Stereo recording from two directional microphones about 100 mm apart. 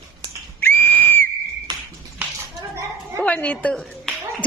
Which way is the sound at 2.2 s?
15° right (ahead or behind).